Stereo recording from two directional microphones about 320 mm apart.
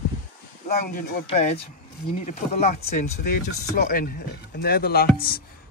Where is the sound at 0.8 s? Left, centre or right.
Left.